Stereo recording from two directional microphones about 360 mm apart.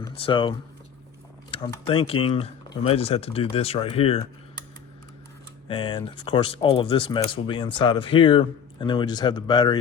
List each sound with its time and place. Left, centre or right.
0.0 s speech: centre
5.6 s speech: centre